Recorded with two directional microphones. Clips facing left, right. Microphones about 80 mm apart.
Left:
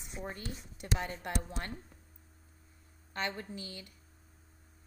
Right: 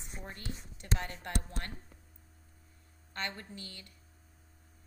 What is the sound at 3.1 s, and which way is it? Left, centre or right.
Speech, centre.